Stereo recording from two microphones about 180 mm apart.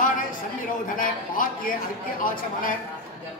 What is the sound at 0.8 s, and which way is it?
A man's voice, 50° left (ahead or behind).